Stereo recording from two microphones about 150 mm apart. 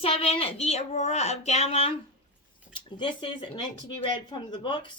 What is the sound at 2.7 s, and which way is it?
Speech, 30° left (ahead or behind).